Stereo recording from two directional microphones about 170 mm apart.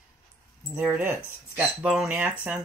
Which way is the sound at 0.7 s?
10° right (ahead or behind).